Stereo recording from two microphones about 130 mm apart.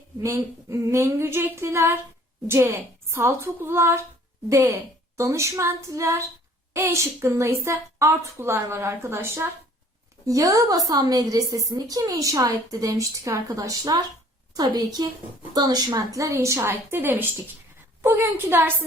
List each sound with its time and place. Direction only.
0.2 s a woman's voice: 20° right (ahead or behind)